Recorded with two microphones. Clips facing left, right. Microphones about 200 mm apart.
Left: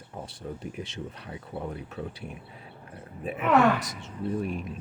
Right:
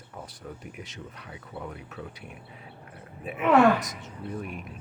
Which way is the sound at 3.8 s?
30° left (ahead or behind).